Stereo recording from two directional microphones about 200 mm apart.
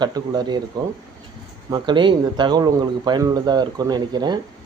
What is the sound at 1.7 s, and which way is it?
Speech, 25° right (ahead or behind).